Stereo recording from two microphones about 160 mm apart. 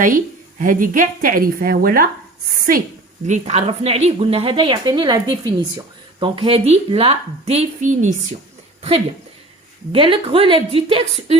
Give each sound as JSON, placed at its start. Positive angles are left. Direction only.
{"t": 0.6, "sound": "speech", "side_deg": -55}
{"t": 3.2, "sound": "a woman's voice", "side_deg": -45}
{"t": 9.9, "sound": "a woman's voice", "side_deg": -35}